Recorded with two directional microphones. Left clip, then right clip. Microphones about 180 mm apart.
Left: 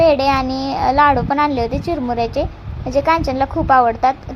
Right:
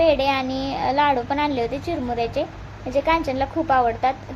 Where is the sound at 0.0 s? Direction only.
20° left (ahead or behind).